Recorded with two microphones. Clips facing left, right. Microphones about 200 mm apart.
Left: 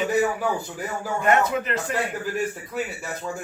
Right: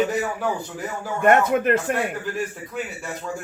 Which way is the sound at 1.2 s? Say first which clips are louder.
Right 4 dB; 55° right (ahead or behind).